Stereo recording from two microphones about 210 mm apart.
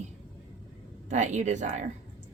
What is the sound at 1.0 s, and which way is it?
Speech, 35° right (ahead or behind).